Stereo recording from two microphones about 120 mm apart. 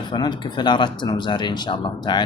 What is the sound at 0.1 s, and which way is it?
Speech, 35° left (ahead or behind).